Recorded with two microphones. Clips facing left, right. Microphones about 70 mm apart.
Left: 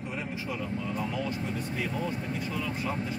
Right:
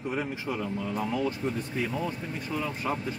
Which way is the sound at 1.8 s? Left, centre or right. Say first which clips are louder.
Right 2 dB; centre.